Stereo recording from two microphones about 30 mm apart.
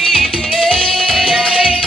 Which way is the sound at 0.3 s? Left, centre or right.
Centre.